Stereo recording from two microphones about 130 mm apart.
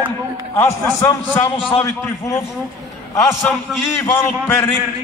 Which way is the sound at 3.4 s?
15° left (ahead or behind).